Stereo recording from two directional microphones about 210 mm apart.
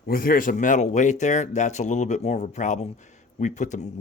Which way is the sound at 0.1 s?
45° left (ahead or behind).